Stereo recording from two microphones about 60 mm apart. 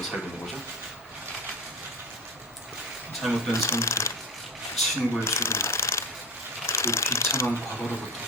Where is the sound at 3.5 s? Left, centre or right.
Left.